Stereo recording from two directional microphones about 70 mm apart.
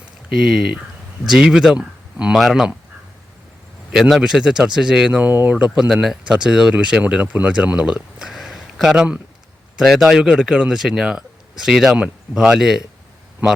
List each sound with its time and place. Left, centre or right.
0.3 s speech: centre
2.3 s speech: centre
4.2 s speech: centre
5.3 s speech: right
5.5 s speech: centre